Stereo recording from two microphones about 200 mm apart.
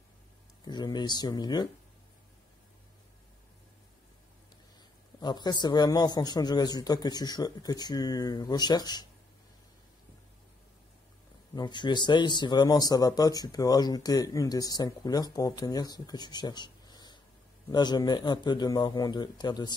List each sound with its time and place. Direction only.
0.7 s speech: 20° left (ahead or behind)
5.2 s speech: 20° left (ahead or behind)
11.5 s speech: 20° left (ahead or behind)